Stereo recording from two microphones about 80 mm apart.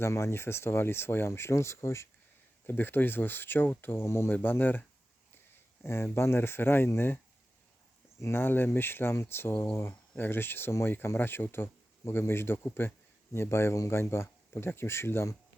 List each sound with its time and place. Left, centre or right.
0.0 s speech: left
2.6 s speech: left
8.2 s speech: left